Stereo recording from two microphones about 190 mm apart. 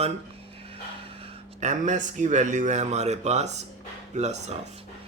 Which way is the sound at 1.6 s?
40° right (ahead or behind).